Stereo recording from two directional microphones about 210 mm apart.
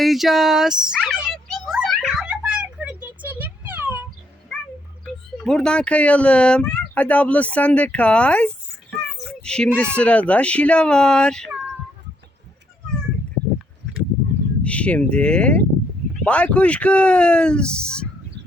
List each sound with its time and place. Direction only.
0.0 s a sound: centre (ahead or behind)
4.5 s wild animals: 5° left (ahead or behind)
5.4 s speech: 5° left (ahead or behind)
14.6 s speech: 5° left (ahead or behind)